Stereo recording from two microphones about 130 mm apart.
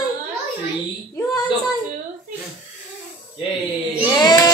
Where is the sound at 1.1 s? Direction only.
30° left (ahead or behind).